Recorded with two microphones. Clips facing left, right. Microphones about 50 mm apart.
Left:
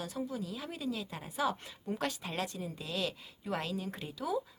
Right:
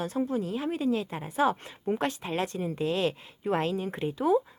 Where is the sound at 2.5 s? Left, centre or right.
Right.